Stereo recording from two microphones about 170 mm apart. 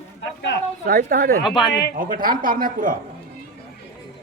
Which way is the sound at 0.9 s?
55° right (ahead or behind).